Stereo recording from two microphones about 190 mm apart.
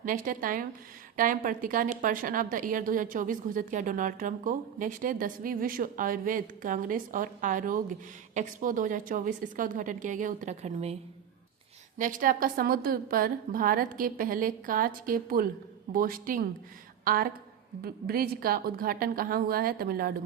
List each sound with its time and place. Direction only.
0.0 s a woman's voice: 45° right (ahead or behind)
11.9 s a woman's voice: 45° right (ahead or behind)